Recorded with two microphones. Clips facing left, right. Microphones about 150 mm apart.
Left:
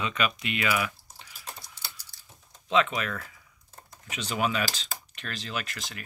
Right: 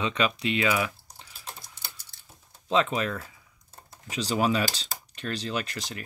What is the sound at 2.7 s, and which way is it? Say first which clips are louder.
Speech: right 1 dB; 35° right (ahead or behind).